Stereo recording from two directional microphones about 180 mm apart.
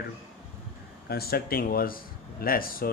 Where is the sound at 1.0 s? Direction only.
60° left (ahead or behind).